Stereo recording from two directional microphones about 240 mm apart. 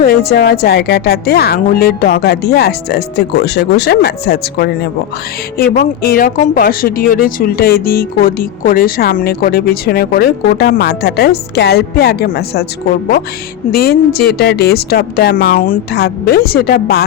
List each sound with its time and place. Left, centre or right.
0.0 s speech: left
13.7 s speech: left